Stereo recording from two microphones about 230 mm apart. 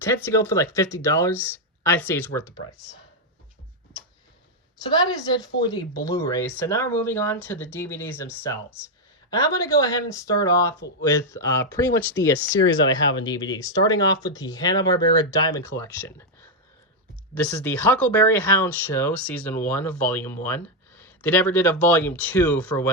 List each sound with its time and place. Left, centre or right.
0.0 s speech: centre
4.9 s speech: centre
12.2 s speech: left
13.1 s speech: centre
17.3 s speech: centre